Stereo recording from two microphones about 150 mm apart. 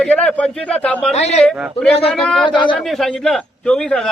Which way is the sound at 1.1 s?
45° left (ahead or behind).